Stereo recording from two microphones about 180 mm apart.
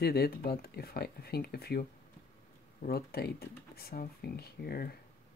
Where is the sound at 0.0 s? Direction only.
60° left (ahead or behind).